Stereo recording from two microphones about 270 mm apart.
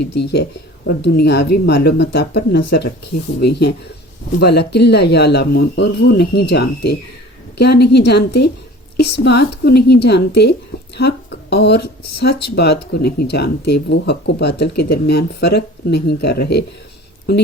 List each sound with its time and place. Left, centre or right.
0.0 s speech: left
0.9 s speech: left